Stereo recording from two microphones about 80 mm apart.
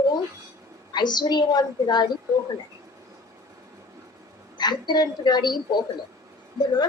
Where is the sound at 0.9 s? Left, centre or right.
Left.